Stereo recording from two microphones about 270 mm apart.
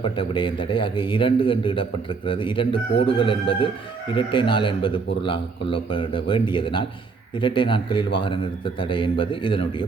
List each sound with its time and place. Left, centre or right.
0.0 s a man's voice: centre